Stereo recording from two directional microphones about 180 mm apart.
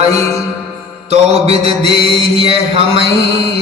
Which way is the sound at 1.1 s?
35° right (ahead or behind).